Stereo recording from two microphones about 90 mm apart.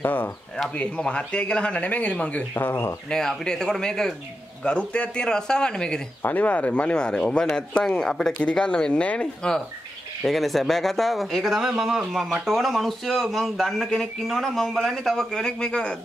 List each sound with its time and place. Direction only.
0.0 s speech: 20° left (ahead or behind)
3.1 s speech: 5° left (ahead or behind)